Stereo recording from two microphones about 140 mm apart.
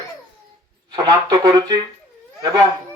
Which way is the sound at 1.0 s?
30° right (ahead or behind).